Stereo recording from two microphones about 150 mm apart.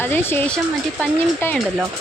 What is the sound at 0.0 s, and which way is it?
A woman's voice, 15° left (ahead or behind).